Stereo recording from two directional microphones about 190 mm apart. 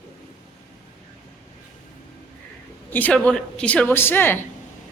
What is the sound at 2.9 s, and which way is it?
A woman's voice, 10° left (ahead or behind).